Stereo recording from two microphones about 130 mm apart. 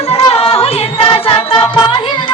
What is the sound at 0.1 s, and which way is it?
Music, 45° left (ahead or behind).